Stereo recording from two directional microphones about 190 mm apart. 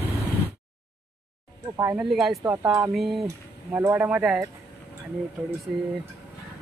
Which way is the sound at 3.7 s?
10° right (ahead or behind).